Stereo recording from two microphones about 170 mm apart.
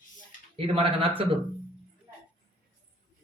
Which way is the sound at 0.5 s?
35° right (ahead or behind).